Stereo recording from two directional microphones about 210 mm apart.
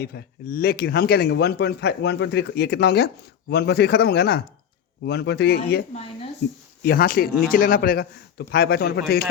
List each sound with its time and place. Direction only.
0.0 s a man's voice: 50° left (ahead or behind)
6.8 s a man's voice: 45° left (ahead or behind)